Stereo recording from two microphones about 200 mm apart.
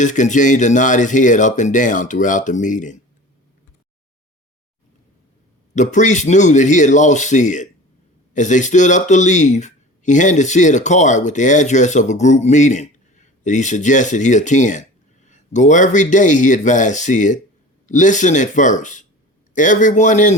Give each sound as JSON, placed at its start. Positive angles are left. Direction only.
{"t": 0.0, "sound": "speech", "side_deg": 40}
{"t": 5.7, "sound": "speech", "side_deg": 35}